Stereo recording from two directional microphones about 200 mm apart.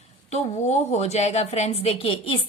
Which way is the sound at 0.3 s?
35° left (ahead or behind).